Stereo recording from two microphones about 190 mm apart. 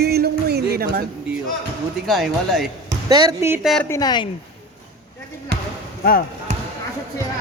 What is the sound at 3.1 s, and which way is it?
Speech, 20° right (ahead or behind).